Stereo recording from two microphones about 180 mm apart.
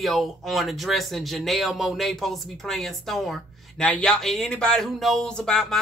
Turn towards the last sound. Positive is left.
turn(degrees=5)  # may be behind; listen again after turning